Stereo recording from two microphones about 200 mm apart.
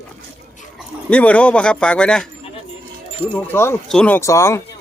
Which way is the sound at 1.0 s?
5° left (ahead or behind).